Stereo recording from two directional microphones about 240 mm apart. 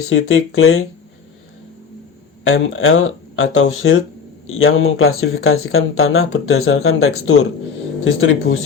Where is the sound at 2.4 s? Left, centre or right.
Left.